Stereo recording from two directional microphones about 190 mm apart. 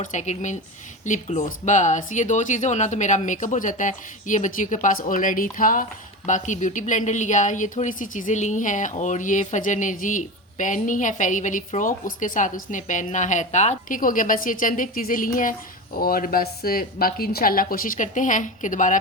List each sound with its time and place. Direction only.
0.0 s speech: 40° left (ahead or behind)